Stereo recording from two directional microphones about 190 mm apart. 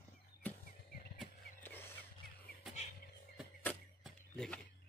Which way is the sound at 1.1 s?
10° left (ahead or behind).